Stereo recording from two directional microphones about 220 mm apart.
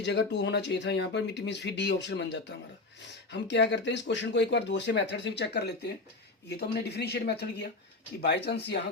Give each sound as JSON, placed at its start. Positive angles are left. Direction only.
{"t": 0.0, "sound": "speech", "side_deg": 50}